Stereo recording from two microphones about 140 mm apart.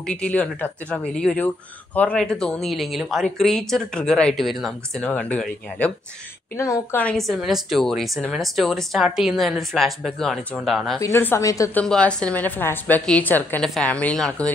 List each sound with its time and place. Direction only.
0.0 s a woman's voice: 5° left (ahead or behind)
6.5 s a woman's voice: 20° left (ahead or behind)
7.0 s speech: 5° left (ahead or behind)
11.0 s a woman's voice: 20° left (ahead or behind)
11.7 s a woman's voice: 5° left (ahead or behind)